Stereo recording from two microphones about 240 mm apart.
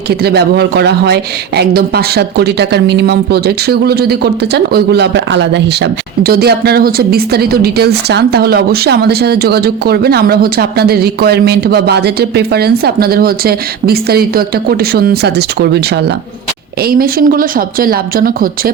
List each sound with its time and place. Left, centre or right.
0.1 s speech: right